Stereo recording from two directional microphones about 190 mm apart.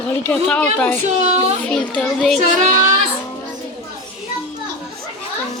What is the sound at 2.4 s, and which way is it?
Speech, 40° right (ahead or behind).